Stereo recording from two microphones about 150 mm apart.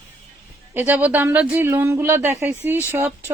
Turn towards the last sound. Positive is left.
turn(degrees=-15)  # may be behind; listen again after turning